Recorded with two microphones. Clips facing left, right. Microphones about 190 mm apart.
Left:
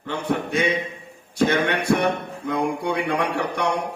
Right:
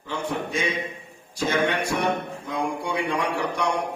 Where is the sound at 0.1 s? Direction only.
60° left (ahead or behind).